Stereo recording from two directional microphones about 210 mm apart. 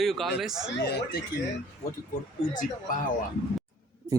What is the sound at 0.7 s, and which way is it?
Speech, 50° left (ahead or behind).